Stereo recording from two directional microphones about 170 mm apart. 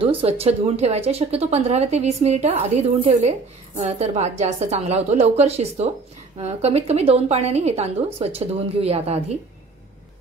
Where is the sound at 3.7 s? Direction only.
40° right (ahead or behind).